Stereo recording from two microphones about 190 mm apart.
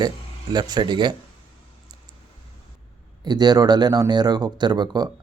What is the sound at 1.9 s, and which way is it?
Clicking, 20° right (ahead or behind).